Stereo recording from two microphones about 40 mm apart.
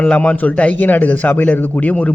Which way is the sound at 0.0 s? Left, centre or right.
Left.